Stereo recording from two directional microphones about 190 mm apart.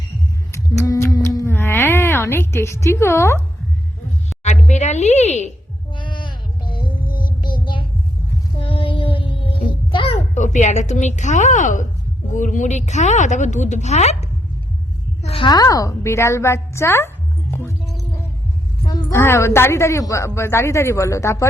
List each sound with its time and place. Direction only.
0.5 s a sound: 15° left (ahead or behind)
4.6 s speech: 35° left (ahead or behind)
5.9 s a sound: 25° left (ahead or behind)
7.1 s child singing: 25° left (ahead or behind)
8.5 s music: 30° left (ahead or behind)
9.6 s a sound: 25° left (ahead or behind)
12.3 s a woman's voice: 40° left (ahead or behind); by 17.1 s 15° left (ahead or behind)
17.5 s music: 10° left (ahead or behind)
18.9 s speech: 15° left (ahead or behind)